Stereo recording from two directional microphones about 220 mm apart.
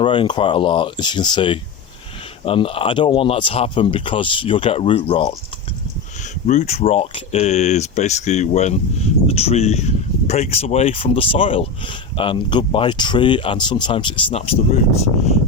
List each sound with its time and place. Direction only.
0.0 s speech: 20° left (ahead or behind)
6.5 s speech: 30° left (ahead or behind)